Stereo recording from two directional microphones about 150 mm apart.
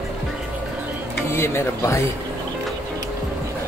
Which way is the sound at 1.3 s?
15° left (ahead or behind).